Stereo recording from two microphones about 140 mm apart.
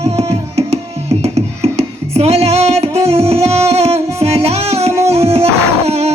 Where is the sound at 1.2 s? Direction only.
50° right (ahead or behind).